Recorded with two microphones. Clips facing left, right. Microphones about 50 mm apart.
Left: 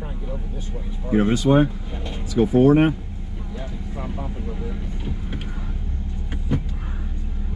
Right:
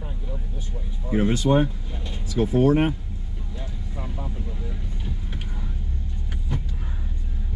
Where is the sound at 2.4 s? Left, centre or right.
Centre.